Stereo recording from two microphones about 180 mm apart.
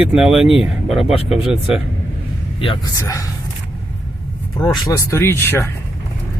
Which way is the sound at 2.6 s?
30° left (ahead or behind).